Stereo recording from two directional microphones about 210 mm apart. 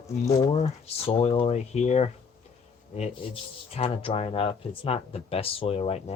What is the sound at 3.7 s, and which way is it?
Speech, 30° left (ahead or behind).